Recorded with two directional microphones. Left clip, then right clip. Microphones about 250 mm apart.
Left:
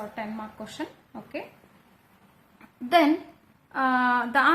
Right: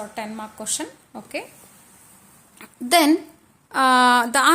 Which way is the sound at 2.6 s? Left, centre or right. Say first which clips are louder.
Right 3 dB; right.